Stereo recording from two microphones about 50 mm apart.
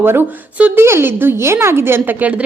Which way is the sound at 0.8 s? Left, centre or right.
Right.